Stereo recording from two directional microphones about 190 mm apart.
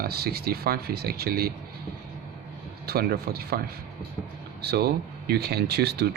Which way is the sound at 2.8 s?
55° right (ahead or behind).